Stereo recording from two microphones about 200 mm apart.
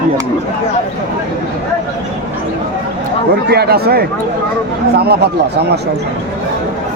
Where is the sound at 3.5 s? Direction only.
50° right (ahead or behind).